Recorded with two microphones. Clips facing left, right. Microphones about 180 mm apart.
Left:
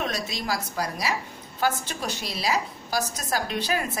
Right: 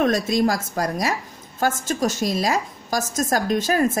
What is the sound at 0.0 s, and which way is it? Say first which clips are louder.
A woman's voice: right 11 dB; 50° right (ahead or behind).